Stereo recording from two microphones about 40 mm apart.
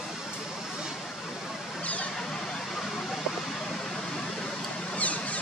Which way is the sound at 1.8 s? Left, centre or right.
Left.